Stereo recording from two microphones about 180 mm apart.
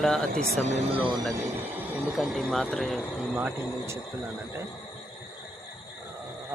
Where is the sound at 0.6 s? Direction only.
40° right (ahead or behind).